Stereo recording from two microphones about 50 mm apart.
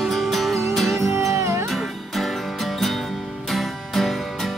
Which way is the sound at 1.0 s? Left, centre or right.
Right.